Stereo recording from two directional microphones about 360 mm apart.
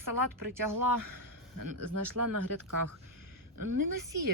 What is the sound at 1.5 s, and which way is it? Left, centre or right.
Speech, right.